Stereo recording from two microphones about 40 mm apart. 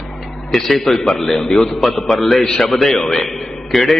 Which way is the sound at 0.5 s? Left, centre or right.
Centre.